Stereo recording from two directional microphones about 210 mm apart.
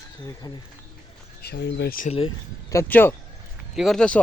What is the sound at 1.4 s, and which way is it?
Speech, 55° left (ahead or behind).